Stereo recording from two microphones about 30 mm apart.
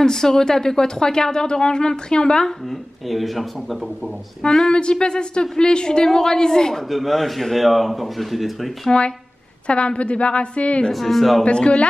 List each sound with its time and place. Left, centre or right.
0.0 s speech: centre
3.1 s speech: centre
4.4 s speech: centre
4.7 s speech: left
6.9 s speech: centre
8.9 s a woman's voice: left
10.9 s speech: centre
11.4 s a woman's voice: left